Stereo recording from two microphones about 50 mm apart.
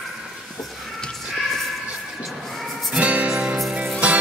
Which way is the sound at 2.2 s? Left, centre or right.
Centre.